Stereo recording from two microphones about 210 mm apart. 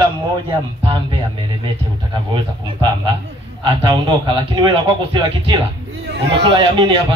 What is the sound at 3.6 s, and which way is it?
Speech, 20° right (ahead or behind).